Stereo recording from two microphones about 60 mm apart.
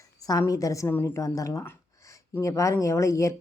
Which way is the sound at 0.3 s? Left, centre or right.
Left.